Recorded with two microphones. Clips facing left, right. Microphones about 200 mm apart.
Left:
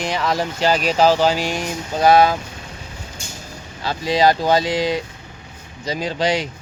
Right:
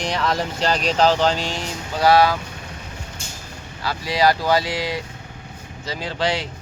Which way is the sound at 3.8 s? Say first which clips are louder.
Left 3 dB; 20° left (ahead or behind).